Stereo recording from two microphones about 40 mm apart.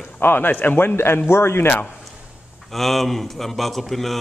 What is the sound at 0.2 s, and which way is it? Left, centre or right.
Speech, left.